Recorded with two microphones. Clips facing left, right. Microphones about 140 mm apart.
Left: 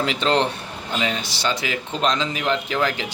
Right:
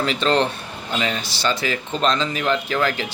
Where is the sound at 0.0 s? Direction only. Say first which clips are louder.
Right 1 dB; 15° left (ahead or behind).